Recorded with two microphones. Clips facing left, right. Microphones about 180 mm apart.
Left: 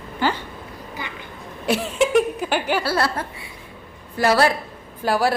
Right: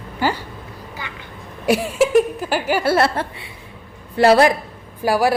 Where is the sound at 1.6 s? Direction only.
10° right (ahead or behind).